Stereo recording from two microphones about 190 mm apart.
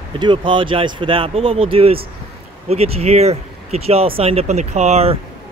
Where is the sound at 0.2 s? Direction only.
25° right (ahead or behind).